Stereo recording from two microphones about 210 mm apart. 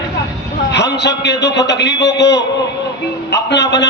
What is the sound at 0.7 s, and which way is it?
A man's voice, 55° left (ahead or behind).